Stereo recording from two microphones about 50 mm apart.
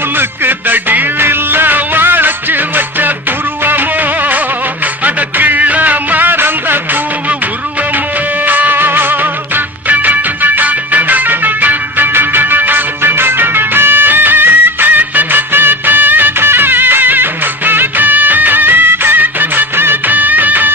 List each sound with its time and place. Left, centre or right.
0.2 s music: right
8.5 s music: right